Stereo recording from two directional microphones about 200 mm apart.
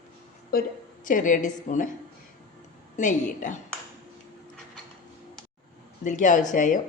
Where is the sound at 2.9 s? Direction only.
40° left (ahead or behind).